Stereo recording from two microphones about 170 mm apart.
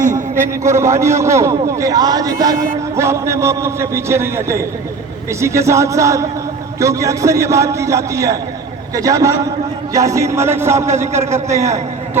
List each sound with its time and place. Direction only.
0.3 s a man's voice: 15° right (ahead or behind)